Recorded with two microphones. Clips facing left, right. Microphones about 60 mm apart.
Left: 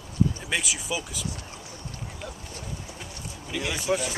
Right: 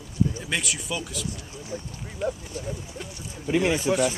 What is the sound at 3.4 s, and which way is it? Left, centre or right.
Speech, right.